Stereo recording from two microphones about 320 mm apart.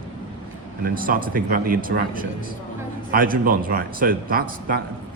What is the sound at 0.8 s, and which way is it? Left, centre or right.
A man's voice, right.